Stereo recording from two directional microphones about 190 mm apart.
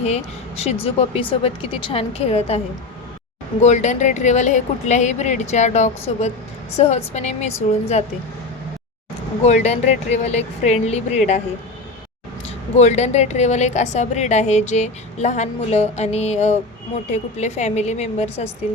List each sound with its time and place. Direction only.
0.0 s a woman's voice: 35° left (ahead or behind)
3.6 s a woman's voice: 35° left (ahead or behind)
9.4 s a woman's voice: 35° left (ahead or behind)
12.7 s a woman's voice: 35° left (ahead or behind)